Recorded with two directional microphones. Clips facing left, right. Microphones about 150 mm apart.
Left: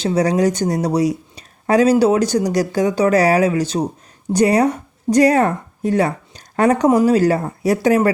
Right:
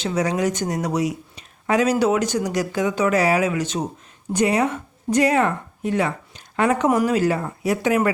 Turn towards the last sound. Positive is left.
turn(degrees=35)  # may be behind; listen again after turning